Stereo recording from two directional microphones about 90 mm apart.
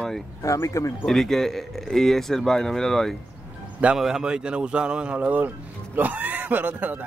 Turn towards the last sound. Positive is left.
turn(degrees=-20)  # may be behind; listen again after turning